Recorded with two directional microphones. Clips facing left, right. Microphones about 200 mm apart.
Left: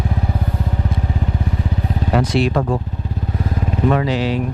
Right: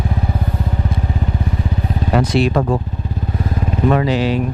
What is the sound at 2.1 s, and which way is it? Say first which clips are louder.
Vehicle: right 2 dB; 10° right (ahead or behind).